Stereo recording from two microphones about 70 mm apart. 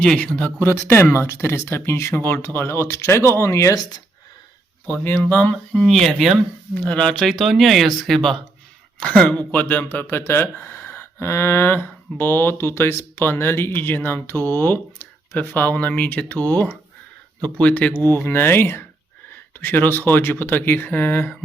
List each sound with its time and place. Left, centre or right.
0.0 s a sound: centre
0.4 s speech: left
4.9 s speech: left
5.3 s a sound: centre
5.8 s speech: centre
6.7 s speech: centre
9.0 s a sound: centre
9.5 s speech: left
18.1 s speech: left